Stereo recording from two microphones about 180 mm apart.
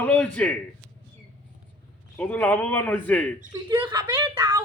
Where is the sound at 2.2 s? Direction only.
10° left (ahead or behind).